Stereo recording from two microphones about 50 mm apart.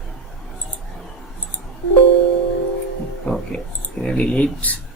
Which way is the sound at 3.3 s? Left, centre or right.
Left.